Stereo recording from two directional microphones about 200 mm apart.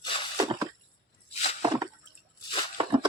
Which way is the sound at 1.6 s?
20° right (ahead or behind).